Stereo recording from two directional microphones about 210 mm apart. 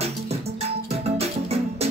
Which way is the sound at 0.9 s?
30° right (ahead or behind).